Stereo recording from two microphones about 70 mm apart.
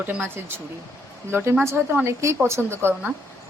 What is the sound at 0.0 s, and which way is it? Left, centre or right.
Speech, right.